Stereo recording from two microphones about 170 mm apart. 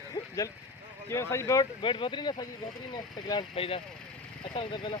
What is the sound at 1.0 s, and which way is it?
Speech, 15° left (ahead or behind).